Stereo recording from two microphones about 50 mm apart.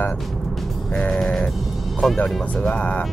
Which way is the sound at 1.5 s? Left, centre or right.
Centre.